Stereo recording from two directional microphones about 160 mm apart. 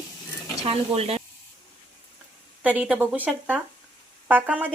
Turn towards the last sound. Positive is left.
turn(degrees=-10)  # may be behind; listen again after turning